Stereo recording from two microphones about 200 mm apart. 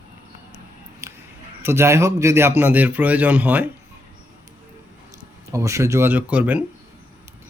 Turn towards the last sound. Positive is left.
turn(degrees=-5)  # may be behind; listen again after turning